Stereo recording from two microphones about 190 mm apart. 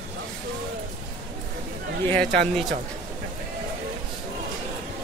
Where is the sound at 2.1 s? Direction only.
5° left (ahead or behind).